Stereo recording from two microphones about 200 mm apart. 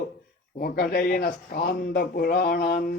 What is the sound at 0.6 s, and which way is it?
Speech, 50° left (ahead or behind).